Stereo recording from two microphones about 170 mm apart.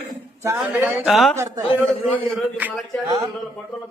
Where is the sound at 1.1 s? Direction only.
Centre (ahead or behind).